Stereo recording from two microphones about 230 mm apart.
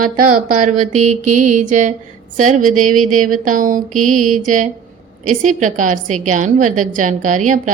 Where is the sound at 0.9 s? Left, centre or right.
Right.